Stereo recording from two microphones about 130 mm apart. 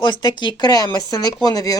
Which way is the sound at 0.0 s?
35° left (ahead or behind).